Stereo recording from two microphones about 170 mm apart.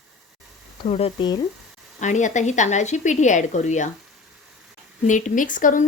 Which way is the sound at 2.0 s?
45° left (ahead or behind).